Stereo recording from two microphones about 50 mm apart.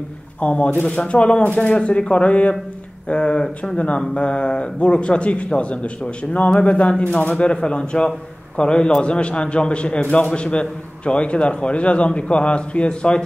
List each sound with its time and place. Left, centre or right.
0.4 s a man's voice: left